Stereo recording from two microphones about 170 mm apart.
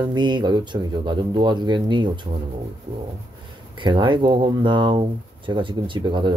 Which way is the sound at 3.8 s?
25° right (ahead or behind).